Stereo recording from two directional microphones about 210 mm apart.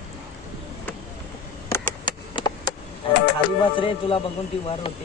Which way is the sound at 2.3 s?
20° left (ahead or behind).